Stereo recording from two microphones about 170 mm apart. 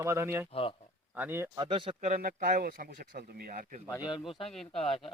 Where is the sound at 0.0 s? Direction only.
15° right (ahead or behind).